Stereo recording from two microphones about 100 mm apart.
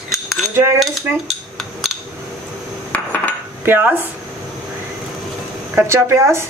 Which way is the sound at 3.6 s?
20° right (ahead or behind).